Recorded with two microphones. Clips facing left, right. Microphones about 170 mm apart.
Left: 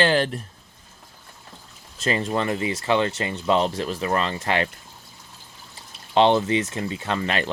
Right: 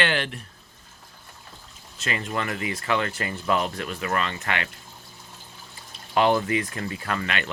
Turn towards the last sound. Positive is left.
turn(degrees=35)  # may be behind; listen again after turning